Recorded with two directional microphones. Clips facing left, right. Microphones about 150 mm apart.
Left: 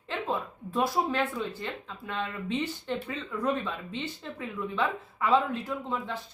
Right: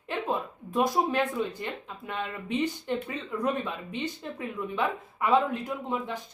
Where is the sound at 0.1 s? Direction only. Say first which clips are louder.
Right 1 dB; 15° right (ahead or behind).